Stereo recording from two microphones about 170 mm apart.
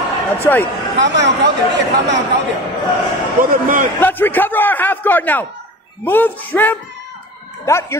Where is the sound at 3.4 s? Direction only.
50° right (ahead or behind).